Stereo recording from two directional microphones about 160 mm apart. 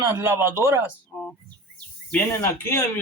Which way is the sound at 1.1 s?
5° left (ahead or behind).